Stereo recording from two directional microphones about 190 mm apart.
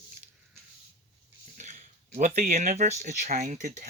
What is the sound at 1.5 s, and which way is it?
Speech, 40° right (ahead or behind).